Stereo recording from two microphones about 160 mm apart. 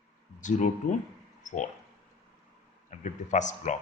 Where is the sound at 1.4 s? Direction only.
50° left (ahead or behind).